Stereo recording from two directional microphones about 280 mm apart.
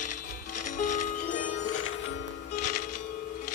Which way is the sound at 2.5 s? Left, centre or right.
Left.